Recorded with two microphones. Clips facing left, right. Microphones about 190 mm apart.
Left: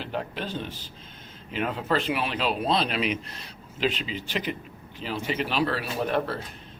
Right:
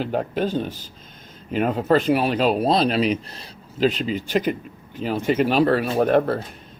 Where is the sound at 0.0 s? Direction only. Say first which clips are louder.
Right 9 dB; 45° right (ahead or behind).